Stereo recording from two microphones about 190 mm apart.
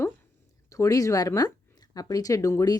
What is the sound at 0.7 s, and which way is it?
A woman's voice, 15° left (ahead or behind).